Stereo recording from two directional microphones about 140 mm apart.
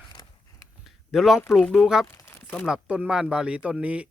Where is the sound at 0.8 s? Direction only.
Centre (ahead or behind).